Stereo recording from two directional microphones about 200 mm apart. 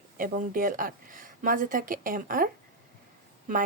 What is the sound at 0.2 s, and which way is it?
Speech, 45° right (ahead or behind).